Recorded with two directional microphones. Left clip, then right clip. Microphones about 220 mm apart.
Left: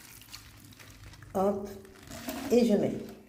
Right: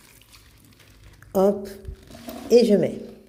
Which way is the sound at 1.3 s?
45° right (ahead or behind).